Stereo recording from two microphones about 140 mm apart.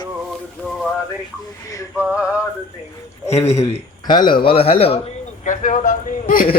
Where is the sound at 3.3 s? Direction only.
50° left (ahead or behind).